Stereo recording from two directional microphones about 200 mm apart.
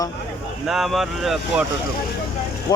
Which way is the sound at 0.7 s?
Centre (ahead or behind).